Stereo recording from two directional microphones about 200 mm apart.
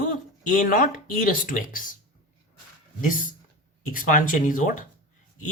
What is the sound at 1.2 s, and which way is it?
Speech, 45° left (ahead or behind).